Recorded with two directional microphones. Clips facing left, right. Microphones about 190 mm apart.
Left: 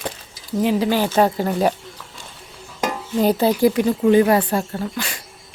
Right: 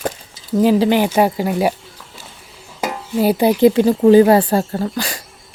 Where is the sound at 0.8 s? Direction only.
15° right (ahead or behind).